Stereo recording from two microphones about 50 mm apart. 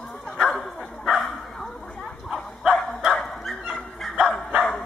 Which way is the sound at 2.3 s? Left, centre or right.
Centre.